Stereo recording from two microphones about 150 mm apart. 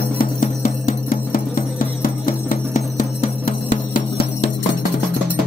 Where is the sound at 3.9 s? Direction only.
75° left (ahead or behind).